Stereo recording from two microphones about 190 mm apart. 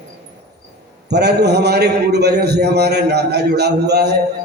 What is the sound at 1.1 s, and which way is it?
A man's voice, 60° right (ahead or behind).